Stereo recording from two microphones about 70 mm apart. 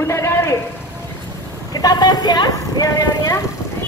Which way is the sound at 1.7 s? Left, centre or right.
Left.